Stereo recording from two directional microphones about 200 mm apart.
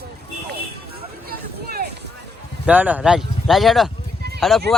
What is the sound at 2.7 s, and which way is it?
Speech, 5° right (ahead or behind).